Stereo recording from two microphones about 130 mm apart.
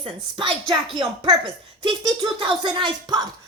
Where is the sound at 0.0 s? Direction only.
40° right (ahead or behind).